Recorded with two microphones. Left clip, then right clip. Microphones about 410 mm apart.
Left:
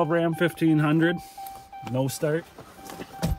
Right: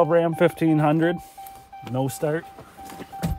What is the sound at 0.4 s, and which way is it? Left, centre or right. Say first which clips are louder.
Speech: right 4 dB; centre.